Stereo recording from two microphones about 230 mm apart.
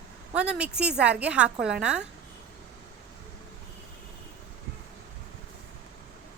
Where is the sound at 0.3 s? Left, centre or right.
Centre.